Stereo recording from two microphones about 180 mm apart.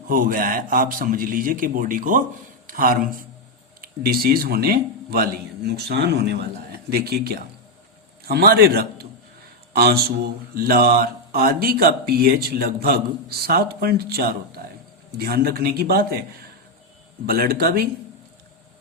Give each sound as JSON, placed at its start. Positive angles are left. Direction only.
{"t": 0.1, "sound": "a man's voice", "side_deg": -50}
{"t": 17.2, "sound": "speech", "side_deg": -55}